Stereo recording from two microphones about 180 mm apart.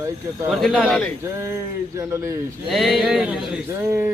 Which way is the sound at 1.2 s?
15° right (ahead or behind).